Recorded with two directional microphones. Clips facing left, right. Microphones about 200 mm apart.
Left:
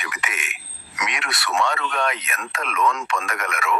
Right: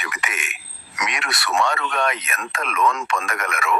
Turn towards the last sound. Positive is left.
turn(degrees=-45)  # may be behind; listen again after turning